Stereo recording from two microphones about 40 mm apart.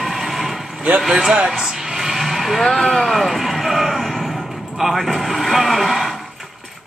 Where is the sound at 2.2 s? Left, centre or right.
Centre.